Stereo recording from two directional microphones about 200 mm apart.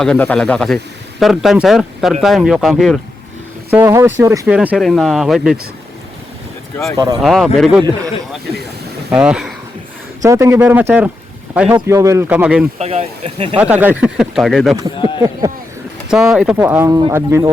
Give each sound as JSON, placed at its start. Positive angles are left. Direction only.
{"t": 0.0, "sound": "speech", "side_deg": 5}
{"t": 3.7, "sound": "speech", "side_deg": -10}
{"t": 6.9, "sound": "speech", "side_deg": -20}
{"t": 7.2, "sound": "speech", "side_deg": 0}
{"t": 9.0, "sound": "speech", "side_deg": -5}
{"t": 12.8, "sound": "speech", "side_deg": -30}
{"t": 13.6, "sound": "speech", "side_deg": -10}
{"t": 14.9, "sound": "speech", "side_deg": 25}
{"t": 15.2, "sound": "speech", "side_deg": -15}
{"t": 16.0, "sound": "speech", "side_deg": 0}